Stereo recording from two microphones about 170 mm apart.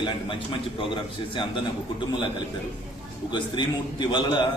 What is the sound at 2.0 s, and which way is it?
Speech, 30° left (ahead or behind).